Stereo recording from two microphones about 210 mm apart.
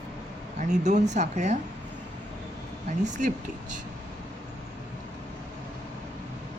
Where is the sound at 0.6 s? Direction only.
35° right (ahead or behind).